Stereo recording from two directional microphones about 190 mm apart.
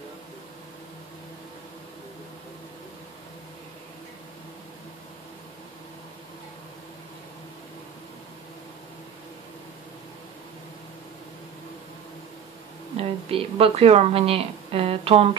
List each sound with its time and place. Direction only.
12.9 s speech: 30° right (ahead or behind)